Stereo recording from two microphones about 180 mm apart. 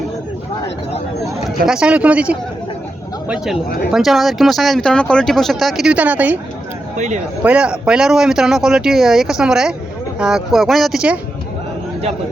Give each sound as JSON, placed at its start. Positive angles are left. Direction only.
{"t": 1.5, "sound": "speech", "side_deg": -5}
{"t": 6.9, "sound": "speech", "side_deg": -40}
{"t": 7.4, "sound": "speech", "side_deg": -5}